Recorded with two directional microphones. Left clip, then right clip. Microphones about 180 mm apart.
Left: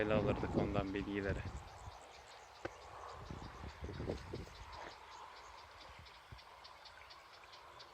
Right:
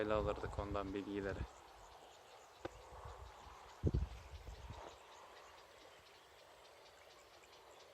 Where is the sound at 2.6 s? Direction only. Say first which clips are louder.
Left 3 dB; 10° right (ahead or behind).